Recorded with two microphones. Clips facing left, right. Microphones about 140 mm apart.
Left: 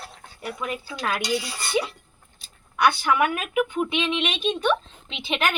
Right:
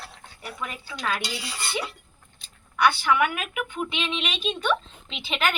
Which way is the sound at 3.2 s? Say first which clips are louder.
Left 2 dB; 40° left (ahead or behind).